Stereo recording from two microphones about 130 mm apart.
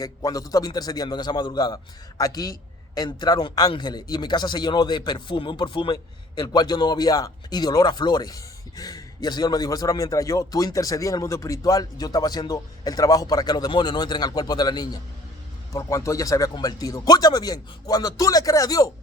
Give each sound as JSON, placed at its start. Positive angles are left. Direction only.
{"t": 0.0, "sound": "a man's voice", "side_deg": 30}